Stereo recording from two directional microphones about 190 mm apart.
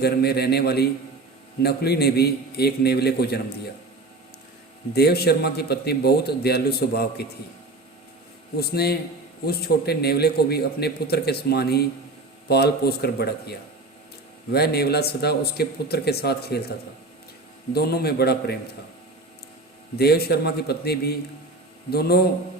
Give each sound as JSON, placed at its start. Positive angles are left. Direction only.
{"t": 0.0, "sound": "a man's voice", "side_deg": 55}
{"t": 4.9, "sound": "a man's voice", "side_deg": 55}
{"t": 8.5, "sound": "a man's voice", "side_deg": 55}
{"t": 17.7, "sound": "a man's voice", "side_deg": 55}
{"t": 20.0, "sound": "a man's voice", "side_deg": 55}